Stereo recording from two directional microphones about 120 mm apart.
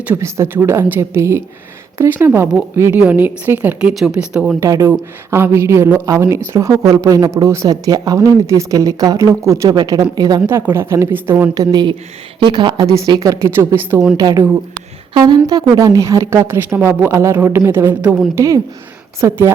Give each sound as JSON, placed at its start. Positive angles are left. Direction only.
{"t": 0.0, "sound": "a woman's voice", "side_deg": -20}
{"t": 4.6, "sound": "a woman's voice", "side_deg": -25}
{"t": 10.4, "sound": "a woman's voice", "side_deg": -20}
{"t": 11.5, "sound": "a woman's voice", "side_deg": -35}